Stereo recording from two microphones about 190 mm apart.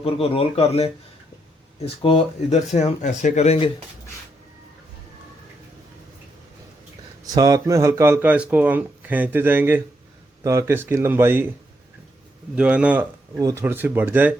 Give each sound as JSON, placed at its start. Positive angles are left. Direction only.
{"t": 0.0, "sound": "speech", "side_deg": 30}
{"t": 7.3, "sound": "speech", "side_deg": -20}
{"t": 12.5, "sound": "speech", "side_deg": -5}